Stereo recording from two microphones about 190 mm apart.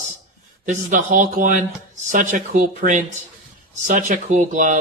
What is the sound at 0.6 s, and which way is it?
Speech, 40° right (ahead or behind).